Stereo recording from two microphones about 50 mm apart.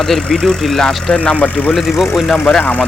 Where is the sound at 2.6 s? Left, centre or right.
Left.